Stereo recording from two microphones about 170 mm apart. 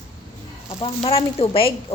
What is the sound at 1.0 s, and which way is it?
Speech, 35° left (ahead or behind).